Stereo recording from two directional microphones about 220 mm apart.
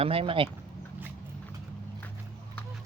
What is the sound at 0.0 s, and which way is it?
Speech, 25° right (ahead or behind).